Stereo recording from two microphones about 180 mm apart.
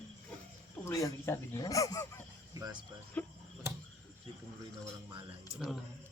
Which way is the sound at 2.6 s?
25° right (ahead or behind).